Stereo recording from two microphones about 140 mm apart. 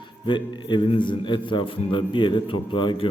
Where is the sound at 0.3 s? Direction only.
35° left (ahead or behind).